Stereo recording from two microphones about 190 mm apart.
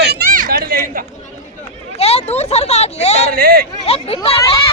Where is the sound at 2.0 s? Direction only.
35° left (ahead or behind).